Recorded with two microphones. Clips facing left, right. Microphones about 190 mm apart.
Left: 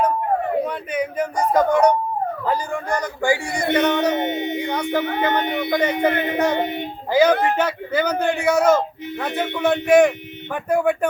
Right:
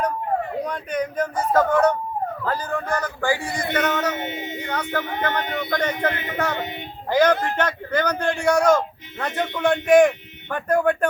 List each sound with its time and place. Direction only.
0.6 s speech: 5° left (ahead or behind)
4.2 s speech: 55° left (ahead or behind)
4.6 s speech: 10° left (ahead or behind)
6.3 s a sound: 20° left (ahead or behind)
6.6 s a woman's voice: 60° left (ahead or behind)
7.1 s a man's voice: 10° left (ahead or behind)